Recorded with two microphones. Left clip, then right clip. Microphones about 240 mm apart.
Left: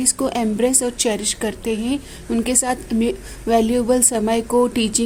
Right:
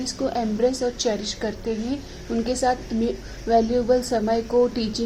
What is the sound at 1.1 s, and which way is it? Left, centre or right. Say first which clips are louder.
Speech: left 4 dB; left.